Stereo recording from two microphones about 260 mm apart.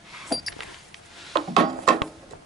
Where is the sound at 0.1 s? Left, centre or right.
Centre.